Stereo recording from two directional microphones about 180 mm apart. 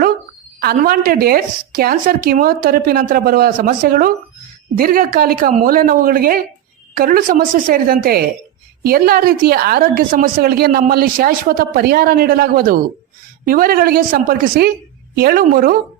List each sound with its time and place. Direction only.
0.6 s a woman's voice: 55° right (ahead or behind)